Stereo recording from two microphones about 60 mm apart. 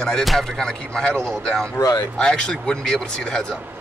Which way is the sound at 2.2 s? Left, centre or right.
Centre.